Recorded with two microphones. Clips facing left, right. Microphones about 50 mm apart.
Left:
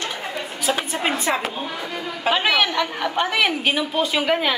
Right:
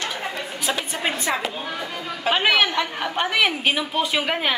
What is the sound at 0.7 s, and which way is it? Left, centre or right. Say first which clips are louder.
Speech: left 2 dB; left.